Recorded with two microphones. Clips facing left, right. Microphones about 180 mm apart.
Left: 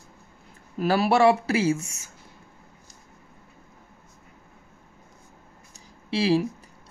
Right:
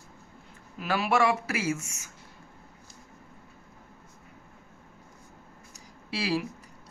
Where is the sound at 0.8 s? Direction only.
35° left (ahead or behind).